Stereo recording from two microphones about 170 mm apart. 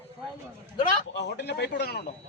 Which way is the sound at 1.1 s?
85° left.